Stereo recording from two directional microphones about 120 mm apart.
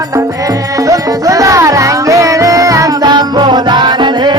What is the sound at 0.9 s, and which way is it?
Music, 30° right (ahead or behind).